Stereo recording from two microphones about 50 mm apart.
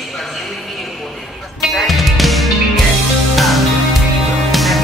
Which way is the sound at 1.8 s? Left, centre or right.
Centre.